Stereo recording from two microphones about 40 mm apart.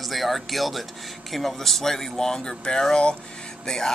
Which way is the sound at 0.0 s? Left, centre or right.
Centre.